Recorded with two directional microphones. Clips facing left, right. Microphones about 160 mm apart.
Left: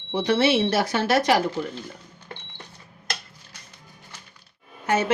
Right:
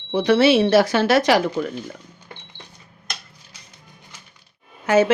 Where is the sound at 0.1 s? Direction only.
90° right.